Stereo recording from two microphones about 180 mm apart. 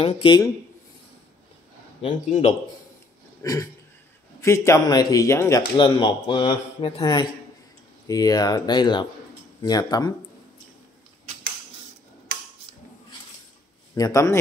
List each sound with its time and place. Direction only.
0.0 s speech: 25° left (ahead or behind)
2.0 s a man's voice: 35° left (ahead or behind)
3.4 s a man's voice: 15° left (ahead or behind)
5.8 s speech: 25° left (ahead or behind)
13.9 s speech: 20° left (ahead or behind)